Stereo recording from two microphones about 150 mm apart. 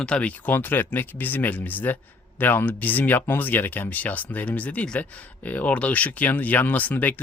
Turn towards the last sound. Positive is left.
turn(degrees=10)  # may be behind; listen again after turning